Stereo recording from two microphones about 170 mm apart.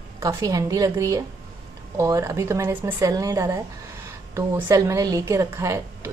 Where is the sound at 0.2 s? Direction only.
15° right (ahead or behind).